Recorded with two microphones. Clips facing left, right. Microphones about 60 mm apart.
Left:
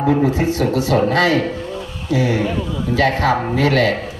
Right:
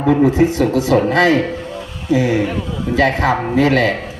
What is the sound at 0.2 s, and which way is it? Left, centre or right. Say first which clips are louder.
Speech: right 4 dB; right.